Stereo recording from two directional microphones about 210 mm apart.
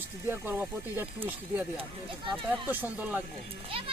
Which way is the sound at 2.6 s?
10° right (ahead or behind).